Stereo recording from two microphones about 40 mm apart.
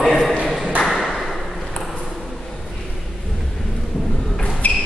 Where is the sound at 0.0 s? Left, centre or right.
Centre.